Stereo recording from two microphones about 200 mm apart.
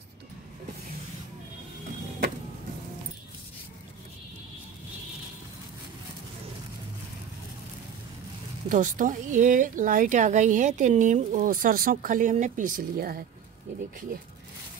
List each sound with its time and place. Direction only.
8.6 s a woman's voice: 40° right (ahead or behind)